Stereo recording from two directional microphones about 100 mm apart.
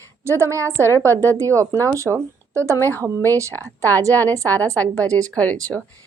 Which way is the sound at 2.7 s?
20° left (ahead or behind).